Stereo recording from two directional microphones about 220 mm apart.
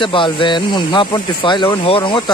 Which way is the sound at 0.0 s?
20° left (ahead or behind).